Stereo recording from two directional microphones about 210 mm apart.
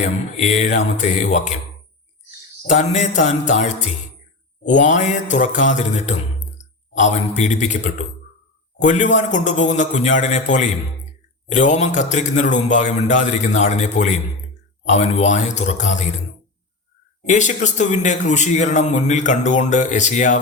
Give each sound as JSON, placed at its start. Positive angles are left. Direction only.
{"t": 0.4, "sound": "speech", "side_deg": 35}
{"t": 2.6, "sound": "speech", "side_deg": 35}
{"t": 8.8, "sound": "speech", "side_deg": 35}
{"t": 17.2, "sound": "speech", "side_deg": 35}